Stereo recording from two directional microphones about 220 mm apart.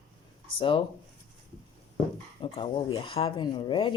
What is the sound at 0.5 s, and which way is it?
Speech, 25° left (ahead or behind).